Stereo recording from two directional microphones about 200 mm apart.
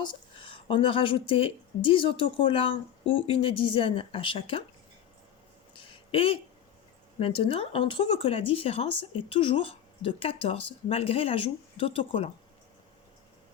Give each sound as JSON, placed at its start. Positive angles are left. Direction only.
{"t": 0.0, "sound": "a woman's voice", "side_deg": 25}
{"t": 5.7, "sound": "a sound", "side_deg": 25}
{"t": 7.2, "sound": "speech", "side_deg": 25}